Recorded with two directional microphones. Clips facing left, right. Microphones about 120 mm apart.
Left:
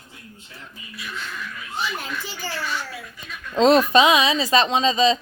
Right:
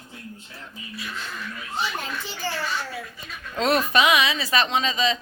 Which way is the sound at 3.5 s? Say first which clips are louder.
Left 6 dB; 25° left (ahead or behind).